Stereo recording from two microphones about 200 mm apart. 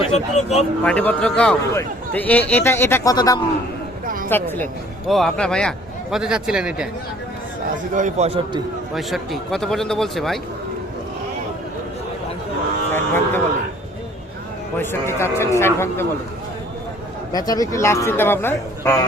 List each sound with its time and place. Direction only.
0.0 s speech: 30° left (ahead or behind)
0.9 s a man's voice: 5° left (ahead or behind)
4.0 s a sound: 45° right (ahead or behind)
4.3 s a man's voice: 10° left (ahead or behind)
7.9 s a man's voice: 35° right (ahead or behind)
9.0 s a man's voice: centre (ahead or behind)
12.9 s a sound: 10° left (ahead or behind)
14.8 s a man's voice: 15° left (ahead or behind)
17.3 s a man's voice: 20° left (ahead or behind)